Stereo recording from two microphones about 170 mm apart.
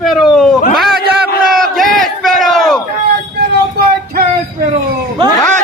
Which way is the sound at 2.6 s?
Centre (ahead or behind).